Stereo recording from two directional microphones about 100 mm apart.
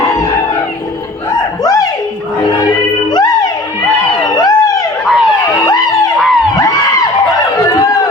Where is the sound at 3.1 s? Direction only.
40° left (ahead or behind).